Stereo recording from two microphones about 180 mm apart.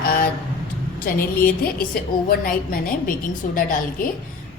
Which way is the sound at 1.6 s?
55° left (ahead or behind).